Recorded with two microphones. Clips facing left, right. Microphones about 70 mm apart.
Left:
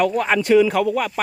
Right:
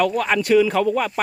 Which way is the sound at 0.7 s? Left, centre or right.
Centre.